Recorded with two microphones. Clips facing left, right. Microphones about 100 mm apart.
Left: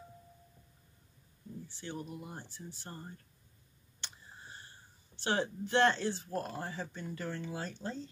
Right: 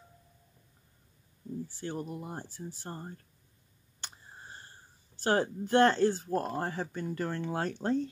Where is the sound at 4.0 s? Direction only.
40° right (ahead or behind).